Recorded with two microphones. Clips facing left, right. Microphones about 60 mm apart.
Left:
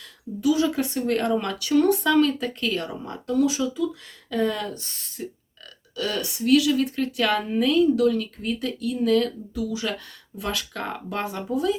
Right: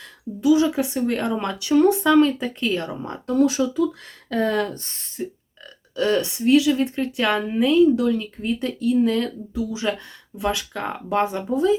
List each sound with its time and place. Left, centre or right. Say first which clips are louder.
0.4 s speech: right 4 dB; right